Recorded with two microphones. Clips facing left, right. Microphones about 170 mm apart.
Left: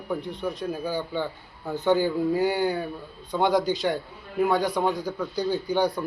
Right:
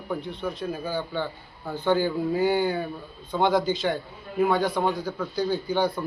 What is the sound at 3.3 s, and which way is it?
Speech, 15° left (ahead or behind).